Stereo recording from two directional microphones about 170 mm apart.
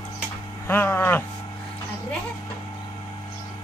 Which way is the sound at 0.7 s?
10° left (ahead or behind).